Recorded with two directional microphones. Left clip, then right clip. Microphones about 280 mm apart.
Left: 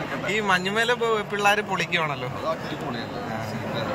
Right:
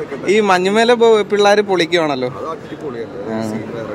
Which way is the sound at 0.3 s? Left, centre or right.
Right.